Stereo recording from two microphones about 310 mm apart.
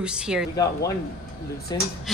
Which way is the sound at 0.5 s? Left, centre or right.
Centre.